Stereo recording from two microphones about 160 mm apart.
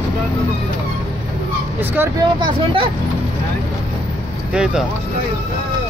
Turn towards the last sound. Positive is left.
turn(degrees=-5)  # may be behind; listen again after turning